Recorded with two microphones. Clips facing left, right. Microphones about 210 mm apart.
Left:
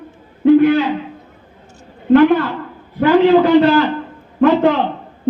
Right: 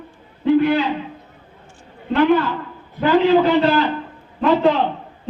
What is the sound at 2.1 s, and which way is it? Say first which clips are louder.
A man's voice: left 5 dB; 50° left (ahead or behind).